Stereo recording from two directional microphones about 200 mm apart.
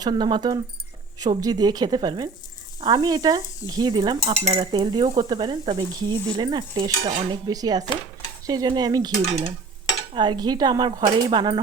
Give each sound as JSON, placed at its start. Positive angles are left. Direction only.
{"t": 0.0, "sound": "speech", "side_deg": -20}